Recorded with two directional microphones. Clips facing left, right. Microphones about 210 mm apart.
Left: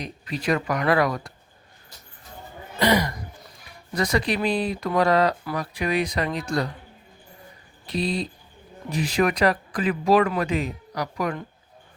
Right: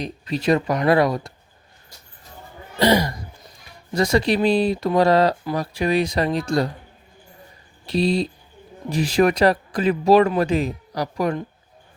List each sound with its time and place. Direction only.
0.0 s speech: 25° right (ahead or behind)
2.7 s speech: 30° right (ahead or behind)
7.9 s speech: 30° right (ahead or behind)